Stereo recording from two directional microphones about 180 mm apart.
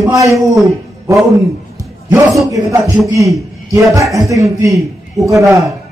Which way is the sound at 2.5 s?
15° right (ahead or behind).